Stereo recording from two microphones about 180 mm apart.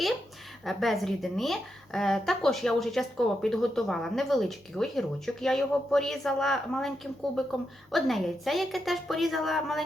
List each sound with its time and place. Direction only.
0.6 s a woman's voice: centre (ahead or behind)